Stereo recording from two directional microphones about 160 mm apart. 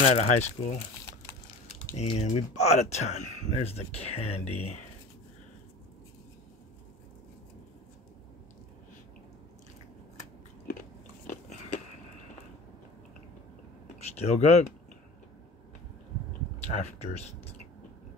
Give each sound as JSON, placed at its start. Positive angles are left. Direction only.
{"t": 0.0, "sound": "speech", "side_deg": 45}
{"t": 2.0, "sound": "speech", "side_deg": 40}
{"t": 13.9, "sound": "speech", "side_deg": 40}
{"t": 16.6, "sound": "speech", "side_deg": 45}